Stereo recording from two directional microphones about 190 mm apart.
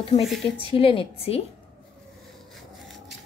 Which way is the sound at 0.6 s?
30° left (ahead or behind).